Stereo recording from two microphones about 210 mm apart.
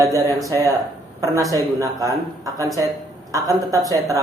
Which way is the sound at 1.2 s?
15° right (ahead or behind).